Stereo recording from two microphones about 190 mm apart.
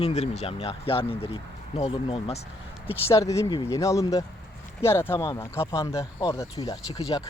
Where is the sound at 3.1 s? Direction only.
15° left (ahead or behind).